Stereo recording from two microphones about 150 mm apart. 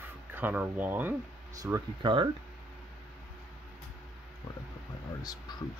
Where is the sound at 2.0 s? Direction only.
35° right (ahead or behind).